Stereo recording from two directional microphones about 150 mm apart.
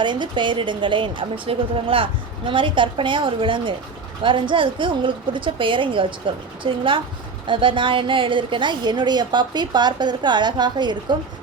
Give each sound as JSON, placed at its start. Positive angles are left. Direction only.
{"t": 0.0, "sound": "a woman's voice", "side_deg": -30}